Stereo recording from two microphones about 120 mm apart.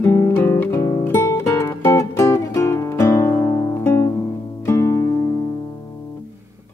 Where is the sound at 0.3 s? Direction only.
20° left (ahead or behind).